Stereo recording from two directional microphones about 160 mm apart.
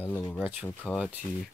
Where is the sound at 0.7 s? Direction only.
5° left (ahead or behind).